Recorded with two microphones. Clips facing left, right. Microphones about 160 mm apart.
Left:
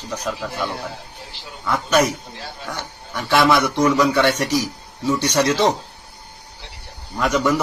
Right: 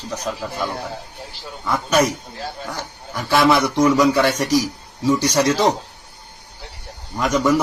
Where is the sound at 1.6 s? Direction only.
10° right (ahead or behind).